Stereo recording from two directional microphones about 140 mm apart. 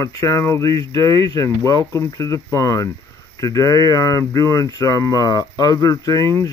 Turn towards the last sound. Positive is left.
turn(degrees=25)  # may be behind; listen again after turning